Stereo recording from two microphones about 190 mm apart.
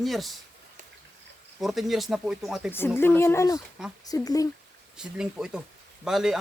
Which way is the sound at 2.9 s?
10° left (ahead or behind).